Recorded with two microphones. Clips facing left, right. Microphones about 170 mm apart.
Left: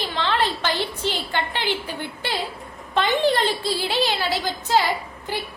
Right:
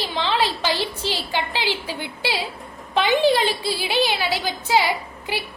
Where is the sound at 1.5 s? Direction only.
90° right.